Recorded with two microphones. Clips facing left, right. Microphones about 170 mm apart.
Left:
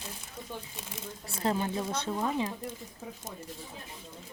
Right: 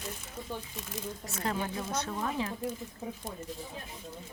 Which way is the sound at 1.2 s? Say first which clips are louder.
Left 5 dB; 30° left (ahead or behind).